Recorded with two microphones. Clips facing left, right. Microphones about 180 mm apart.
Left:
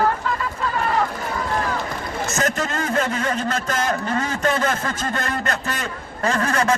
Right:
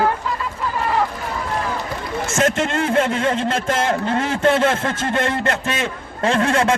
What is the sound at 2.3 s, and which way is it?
A man's voice, 25° right (ahead or behind).